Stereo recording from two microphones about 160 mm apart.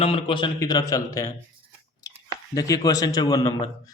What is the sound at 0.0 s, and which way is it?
A man's voice, 35° left (ahead or behind).